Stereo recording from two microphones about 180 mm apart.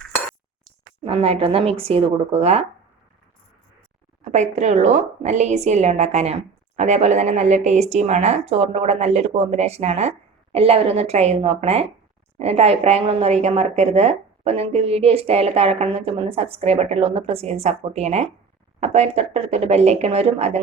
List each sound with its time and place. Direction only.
0.6 s a woman's voice: 30° right (ahead or behind)
4.2 s speech: 40° right (ahead or behind)